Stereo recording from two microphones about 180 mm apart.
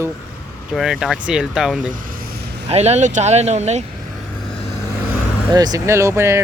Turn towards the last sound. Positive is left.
turn(degrees=-15)  # may be behind; listen again after turning